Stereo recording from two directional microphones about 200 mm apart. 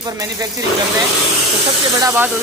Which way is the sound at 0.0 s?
15° right (ahead or behind).